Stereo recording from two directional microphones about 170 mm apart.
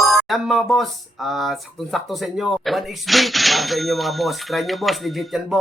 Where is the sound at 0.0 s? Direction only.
Centre (ahead or behind).